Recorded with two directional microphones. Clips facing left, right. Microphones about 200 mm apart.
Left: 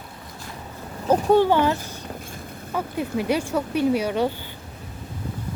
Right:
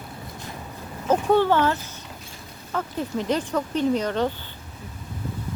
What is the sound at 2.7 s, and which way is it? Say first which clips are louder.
Speech: left 1 dB; 10° left (ahead or behind).